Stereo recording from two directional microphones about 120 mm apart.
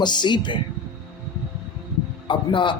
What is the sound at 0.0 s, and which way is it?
Speech, 40° left (ahead or behind).